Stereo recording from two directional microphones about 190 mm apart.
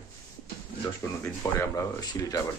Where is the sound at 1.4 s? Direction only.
15° left (ahead or behind).